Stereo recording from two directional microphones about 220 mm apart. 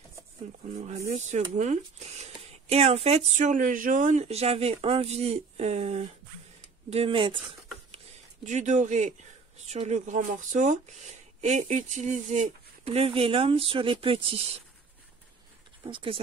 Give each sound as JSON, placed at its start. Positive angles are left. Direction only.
{"t": 1.1, "sound": "speech", "side_deg": -30}
{"t": 8.5, "sound": "speech", "side_deg": -35}
{"t": 15.8, "sound": "speech", "side_deg": -25}